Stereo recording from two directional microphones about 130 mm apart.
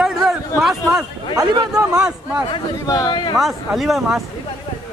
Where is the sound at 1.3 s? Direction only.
30° right (ahead or behind).